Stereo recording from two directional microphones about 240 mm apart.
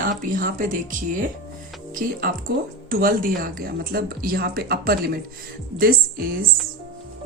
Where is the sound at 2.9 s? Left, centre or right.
Right.